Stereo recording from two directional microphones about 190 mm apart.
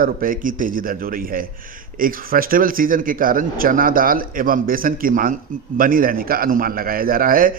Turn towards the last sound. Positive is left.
turn(degrees=-45)  # may be behind; listen again after turning